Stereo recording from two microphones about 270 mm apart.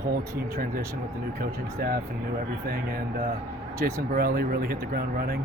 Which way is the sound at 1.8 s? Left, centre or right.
Right.